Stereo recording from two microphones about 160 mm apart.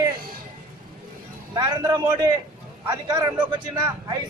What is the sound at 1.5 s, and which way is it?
Speech, 25° right (ahead or behind).